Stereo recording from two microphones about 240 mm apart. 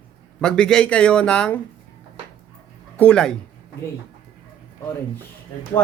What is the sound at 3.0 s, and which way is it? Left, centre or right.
Speech, centre.